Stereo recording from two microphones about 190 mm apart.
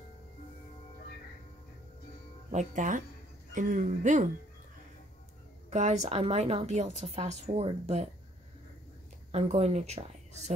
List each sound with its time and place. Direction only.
2.5 s speech: 40° right (ahead or behind)
5.7 s speech: 35° right (ahead or behind)
9.3 s speech: 35° right (ahead or behind)